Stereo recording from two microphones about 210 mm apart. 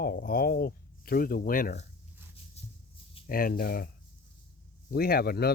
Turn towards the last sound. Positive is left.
turn(degrees=50)  # may be behind; listen again after turning